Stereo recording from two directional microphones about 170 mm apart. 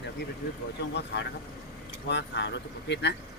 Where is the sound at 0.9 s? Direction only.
90° left.